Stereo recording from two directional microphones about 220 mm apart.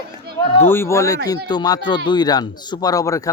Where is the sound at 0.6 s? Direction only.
10° left (ahead or behind).